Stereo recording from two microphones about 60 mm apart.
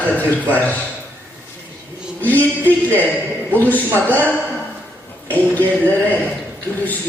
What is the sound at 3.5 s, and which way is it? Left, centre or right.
Speech, left.